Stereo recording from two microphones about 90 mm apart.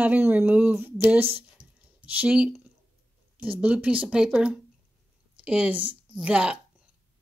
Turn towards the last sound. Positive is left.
turn(degrees=-10)  # may be behind; listen again after turning